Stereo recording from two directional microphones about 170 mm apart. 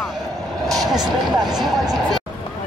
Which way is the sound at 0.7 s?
Centre (ahead or behind).